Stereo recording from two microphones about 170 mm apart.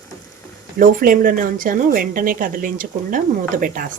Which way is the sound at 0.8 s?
55° right (ahead or behind).